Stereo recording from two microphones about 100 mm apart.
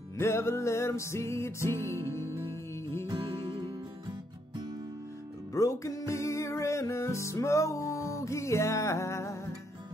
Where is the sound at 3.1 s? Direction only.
70° right (ahead or behind).